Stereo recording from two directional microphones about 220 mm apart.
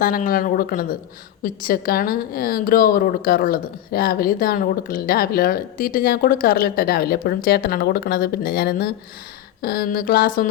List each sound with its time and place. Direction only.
0.0 s a woman's voice: 40° left (ahead or behind)